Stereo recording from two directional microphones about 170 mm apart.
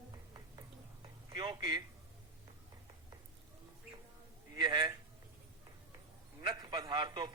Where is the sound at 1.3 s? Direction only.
25° right (ahead or behind).